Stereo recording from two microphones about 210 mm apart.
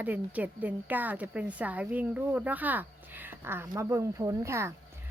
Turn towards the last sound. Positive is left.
turn(degrees=-15)  # may be behind; listen again after turning